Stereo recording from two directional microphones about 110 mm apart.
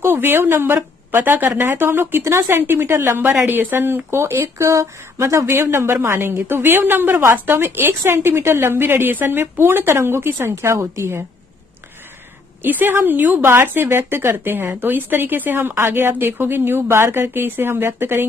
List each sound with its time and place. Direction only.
0.0 s speech: 20° right (ahead or behind)
12.6 s speech: 20° right (ahead or behind)